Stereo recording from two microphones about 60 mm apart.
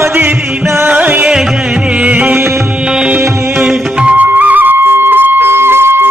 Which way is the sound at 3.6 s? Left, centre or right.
Centre.